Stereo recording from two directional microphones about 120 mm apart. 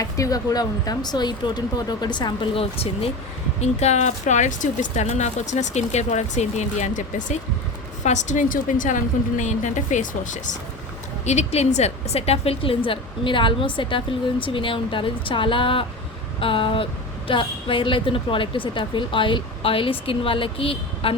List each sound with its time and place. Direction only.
0.0 s speech: 30° left (ahead or behind); by 3.1 s 55° left (ahead or behind)
3.6 s a woman's voice: 70° left (ahead or behind); by 10.6 s 90° left
11.3 s a woman's voice: 70° left (ahead or behind); by 21.2 s 50° left (ahead or behind)